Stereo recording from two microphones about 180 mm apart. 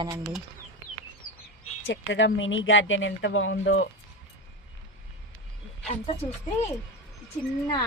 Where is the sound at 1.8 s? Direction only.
90° left.